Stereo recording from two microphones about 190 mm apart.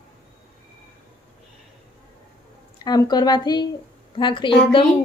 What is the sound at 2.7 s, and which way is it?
A woman's voice, 20° left (ahead or behind).